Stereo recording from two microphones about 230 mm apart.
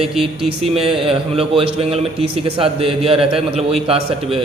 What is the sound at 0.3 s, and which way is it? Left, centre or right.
A man's voice, right.